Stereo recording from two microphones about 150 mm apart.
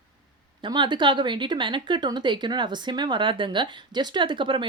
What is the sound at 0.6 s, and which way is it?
Speech, 30° right (ahead or behind).